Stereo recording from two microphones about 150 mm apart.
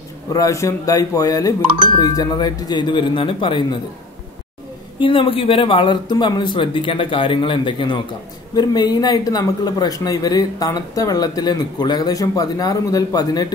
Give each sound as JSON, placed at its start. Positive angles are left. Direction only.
{"t": 0.3, "sound": "speech", "side_deg": 20}
{"t": 5.0, "sound": "speech", "side_deg": 35}